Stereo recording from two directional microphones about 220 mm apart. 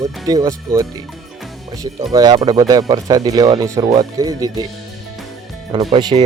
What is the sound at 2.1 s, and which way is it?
Speech, 20° right (ahead or behind).